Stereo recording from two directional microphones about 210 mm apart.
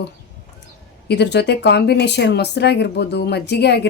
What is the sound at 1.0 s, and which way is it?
A woman's voice, 55° left (ahead or behind).